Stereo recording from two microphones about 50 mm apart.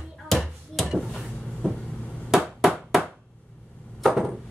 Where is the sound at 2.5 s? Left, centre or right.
Centre.